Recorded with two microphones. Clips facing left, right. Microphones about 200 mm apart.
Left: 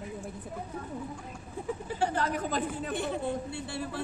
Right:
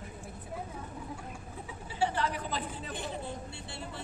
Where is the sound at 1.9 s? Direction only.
45° left (ahead or behind).